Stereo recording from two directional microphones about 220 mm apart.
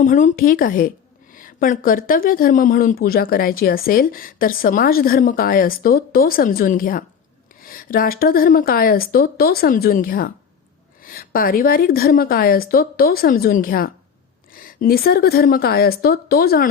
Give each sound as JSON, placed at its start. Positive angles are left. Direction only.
{"t": 0.0, "sound": "speech", "side_deg": 35}